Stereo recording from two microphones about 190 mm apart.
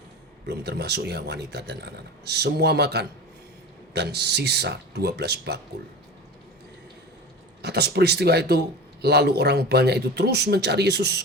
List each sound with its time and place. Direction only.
0.4 s a man's voice: 60° right (ahead or behind)
7.6 s a man's voice: 60° right (ahead or behind)